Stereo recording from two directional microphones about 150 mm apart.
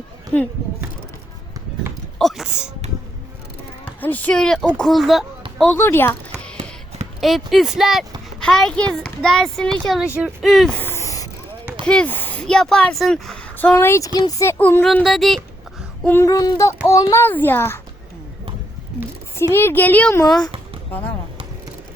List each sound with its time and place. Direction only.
2.1 s a sound: centre (ahead or behind)
4.0 s speech: 10° left (ahead or behind)
5.7 s speech: 15° left (ahead or behind)
7.2 s a child's voice: centre (ahead or behind)
10.8 s a sound: 15° left (ahead or behind)
11.8 s speech: 5° left (ahead or behind)
13.7 s speech: 15° left (ahead or behind)
14.8 s speech: centre (ahead or behind)
16.0 s a sound: 20° left (ahead or behind)
16.8 s speech: 20° left (ahead or behind)
19.5 s speech: 15° left (ahead or behind)
20.1 s a sound: 25° left (ahead or behind)